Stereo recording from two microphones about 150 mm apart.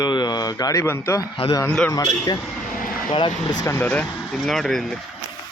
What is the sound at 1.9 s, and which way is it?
Speech, 25° left (ahead or behind).